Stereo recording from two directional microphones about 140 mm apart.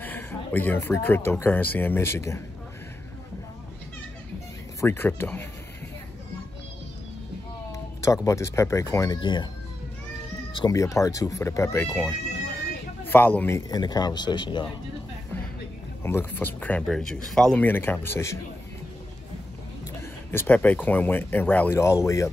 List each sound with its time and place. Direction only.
0.0 s speech: 15° left (ahead or behind)
4.7 s speech: 15° left (ahead or behind)
7.7 s speech: 20° left (ahead or behind)
10.5 s speech: 25° left (ahead or behind)
13.7 s speech: 30° left (ahead or behind)
16.0 s speech: 15° left (ahead or behind)
20.2 s speech: 15° left (ahead or behind)